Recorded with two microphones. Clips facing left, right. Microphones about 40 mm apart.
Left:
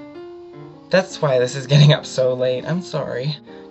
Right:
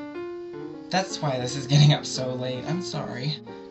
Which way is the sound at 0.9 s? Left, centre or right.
Left.